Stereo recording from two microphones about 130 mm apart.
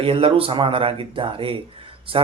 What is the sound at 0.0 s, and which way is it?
Speech, 45° right (ahead or behind).